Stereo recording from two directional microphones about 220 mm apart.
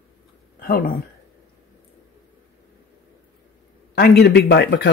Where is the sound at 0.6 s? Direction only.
45° left (ahead or behind).